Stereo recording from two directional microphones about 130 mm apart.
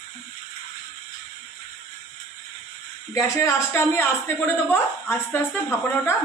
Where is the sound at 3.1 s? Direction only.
25° left (ahead or behind).